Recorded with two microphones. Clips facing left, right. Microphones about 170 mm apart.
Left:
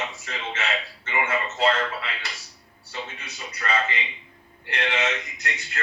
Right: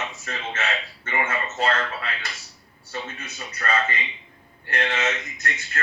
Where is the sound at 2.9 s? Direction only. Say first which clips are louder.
Right 2 dB; 50° right (ahead or behind).